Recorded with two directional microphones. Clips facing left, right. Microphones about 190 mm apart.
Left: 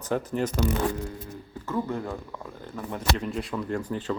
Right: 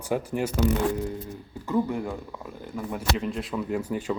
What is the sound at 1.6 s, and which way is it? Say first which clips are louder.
Speech: right 3 dB; 15° right (ahead or behind).